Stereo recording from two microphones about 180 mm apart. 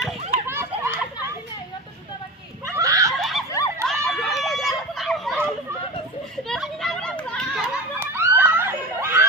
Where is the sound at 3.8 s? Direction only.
Centre (ahead or behind).